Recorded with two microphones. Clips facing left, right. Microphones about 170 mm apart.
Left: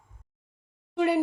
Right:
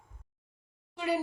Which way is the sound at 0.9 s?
60° left (ahead or behind).